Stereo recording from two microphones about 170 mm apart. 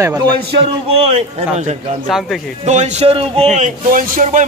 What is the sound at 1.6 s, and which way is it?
Speech, 40° right (ahead or behind).